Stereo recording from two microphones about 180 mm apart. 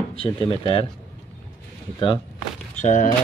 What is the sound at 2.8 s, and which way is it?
Speech, 40° left (ahead or behind).